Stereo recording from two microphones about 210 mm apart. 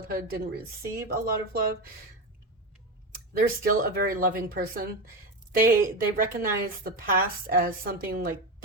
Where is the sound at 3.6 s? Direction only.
45° right (ahead or behind).